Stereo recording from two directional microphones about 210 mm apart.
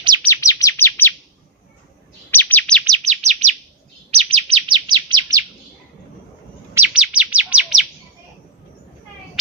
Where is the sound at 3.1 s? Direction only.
30° right (ahead or behind).